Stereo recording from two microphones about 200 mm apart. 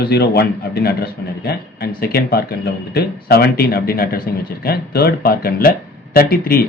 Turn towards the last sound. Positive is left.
turn(degrees=50)  # may be behind; listen again after turning